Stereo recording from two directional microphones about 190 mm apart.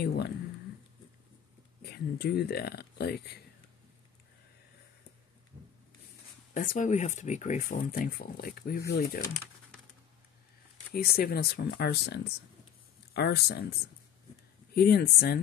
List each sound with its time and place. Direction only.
0.0 s speech: 60° left (ahead or behind)
1.8 s speech: 55° left (ahead or behind)
6.5 s speech: 45° left (ahead or behind)
10.9 s speech: 50° left (ahead or behind)
14.8 s speech: 55° left (ahead or behind)